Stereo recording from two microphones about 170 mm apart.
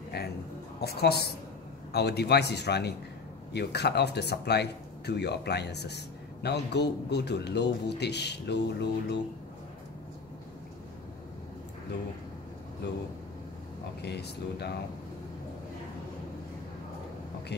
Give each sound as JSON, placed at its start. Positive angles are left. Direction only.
{"t": 0.1, "sound": "a sound", "side_deg": 70}
{"t": 0.7, "sound": "speech", "side_deg": 70}
{"t": 12.8, "sound": "speech", "side_deg": 85}
{"t": 14.0, "sound": "speech", "side_deg": 75}